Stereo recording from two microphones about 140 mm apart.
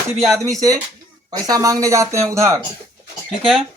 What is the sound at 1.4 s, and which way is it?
Speech, 25° right (ahead or behind).